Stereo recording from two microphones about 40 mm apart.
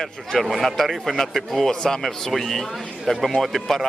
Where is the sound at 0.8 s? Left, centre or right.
Centre.